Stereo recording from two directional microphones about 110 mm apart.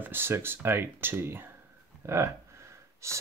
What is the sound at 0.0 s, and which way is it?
Speech, 20° right (ahead or behind).